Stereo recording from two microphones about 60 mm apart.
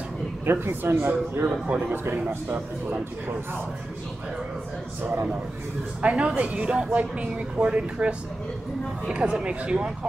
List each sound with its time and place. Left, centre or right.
0.5 s speech: right
2.1 s speech: right
6.0 s speech: right